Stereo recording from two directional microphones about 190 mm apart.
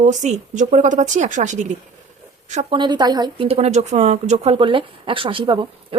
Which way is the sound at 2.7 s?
25° right (ahead or behind).